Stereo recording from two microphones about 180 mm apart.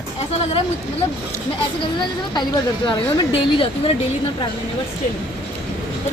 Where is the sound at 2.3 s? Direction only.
25° left (ahead or behind).